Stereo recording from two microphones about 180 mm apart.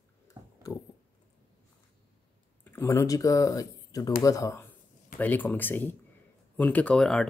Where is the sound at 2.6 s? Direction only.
15° left (ahead or behind).